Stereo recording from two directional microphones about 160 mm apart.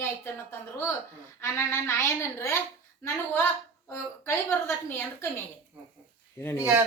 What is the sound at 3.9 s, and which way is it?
A woman's voice, 15° left (ahead or behind).